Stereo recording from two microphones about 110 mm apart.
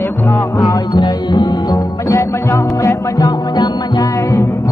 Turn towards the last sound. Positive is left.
turn(degrees=40)  # may be behind; listen again after turning